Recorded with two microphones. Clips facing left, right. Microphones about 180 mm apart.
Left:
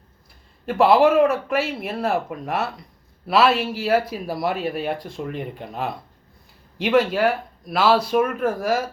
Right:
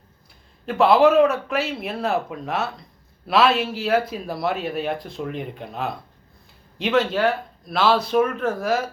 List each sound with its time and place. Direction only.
0.6 s speech: 5° left (ahead or behind)